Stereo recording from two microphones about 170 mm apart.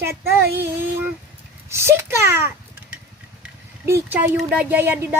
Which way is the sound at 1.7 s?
15° right (ahead or behind).